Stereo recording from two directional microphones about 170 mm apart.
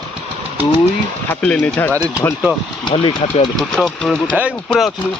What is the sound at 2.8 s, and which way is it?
Speech, 30° left (ahead or behind).